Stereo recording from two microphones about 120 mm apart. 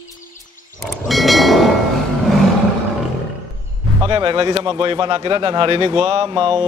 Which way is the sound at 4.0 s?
40° right (ahead or behind).